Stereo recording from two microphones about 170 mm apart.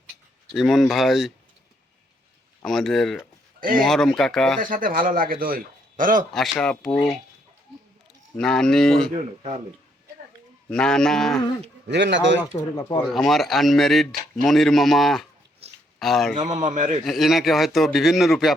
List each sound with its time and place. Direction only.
0.5 s a man's voice: centre (ahead or behind)
2.6 s a man's voice: centre (ahead or behind)
4.6 s a man's voice: 55° right (ahead or behind)
6.3 s a man's voice: centre (ahead or behind)
8.4 s a man's voice: 5° left (ahead or behind)
10.7 s a man's voice: 5° left (ahead or behind)
11.9 s speech: 90° right
13.1 s a man's voice: centre (ahead or behind)
15.6 s a sound: 35° right (ahead or behind)
16.0 s speech: centre (ahead or behind)
16.4 s a man's voice: 40° right (ahead or behind)
17.0 s a man's voice: centre (ahead or behind)